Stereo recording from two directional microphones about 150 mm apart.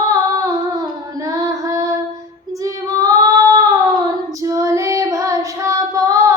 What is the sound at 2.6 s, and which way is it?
Child singing, 20° right (ahead or behind).